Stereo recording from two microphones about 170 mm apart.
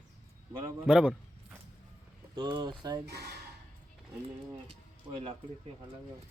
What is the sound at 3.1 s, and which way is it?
Speech, 70° right (ahead or behind).